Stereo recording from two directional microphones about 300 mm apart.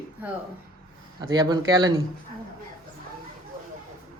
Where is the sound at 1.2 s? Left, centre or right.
Centre.